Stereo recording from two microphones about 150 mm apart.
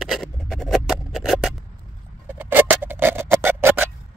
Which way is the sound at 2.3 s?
10° right (ahead or behind).